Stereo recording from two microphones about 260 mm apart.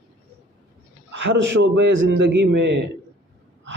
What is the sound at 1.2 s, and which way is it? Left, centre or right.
A man's voice, right.